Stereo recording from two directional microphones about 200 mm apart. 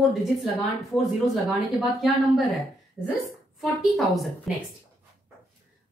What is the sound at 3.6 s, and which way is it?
Speech, centre (ahead or behind).